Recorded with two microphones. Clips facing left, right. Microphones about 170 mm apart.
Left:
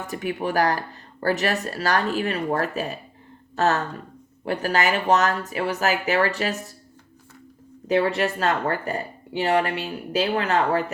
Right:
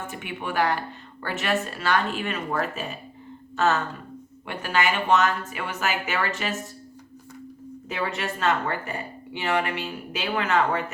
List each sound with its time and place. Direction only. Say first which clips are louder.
0.1 s speech: left 6 dB; 40° left (ahead or behind)
7.9 s speech: left 8 dB; 35° left (ahead or behind)